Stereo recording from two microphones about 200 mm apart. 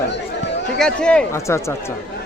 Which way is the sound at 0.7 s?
5° left (ahead or behind).